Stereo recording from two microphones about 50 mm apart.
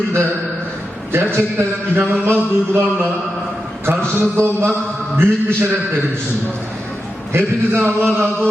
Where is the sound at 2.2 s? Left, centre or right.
Right.